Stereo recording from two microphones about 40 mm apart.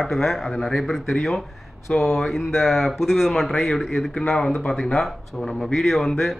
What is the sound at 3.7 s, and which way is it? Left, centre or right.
Speech, centre.